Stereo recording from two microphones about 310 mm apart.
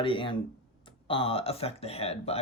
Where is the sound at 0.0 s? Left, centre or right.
Centre.